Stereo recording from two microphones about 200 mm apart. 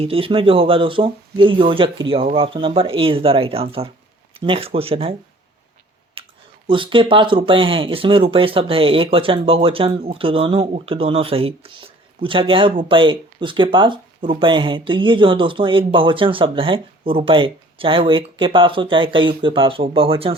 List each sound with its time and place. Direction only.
0.0 s speech: 30° right (ahead or behind)
6.2 s clicking: 25° right (ahead or behind)
6.7 s speech: 25° right (ahead or behind)